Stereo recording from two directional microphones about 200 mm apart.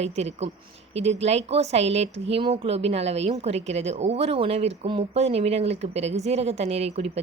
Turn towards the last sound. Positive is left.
turn(degrees=-30)  # may be behind; listen again after turning